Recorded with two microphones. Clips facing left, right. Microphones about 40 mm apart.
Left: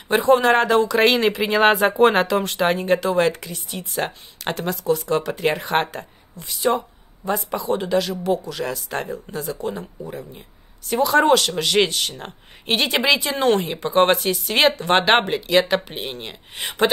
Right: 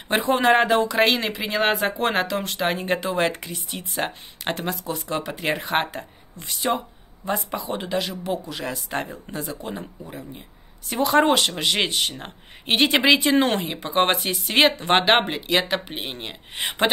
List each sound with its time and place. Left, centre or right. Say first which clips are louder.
0.2 s speech: left 2 dB; centre
0.9 s speech: left 4 dB; centre
2.8 s speech: left 4 dB; centre
10.0 s speech: left 4 dB; centre
11.0 s speech: left 2 dB; right
13.6 s speech: left 4 dB; centre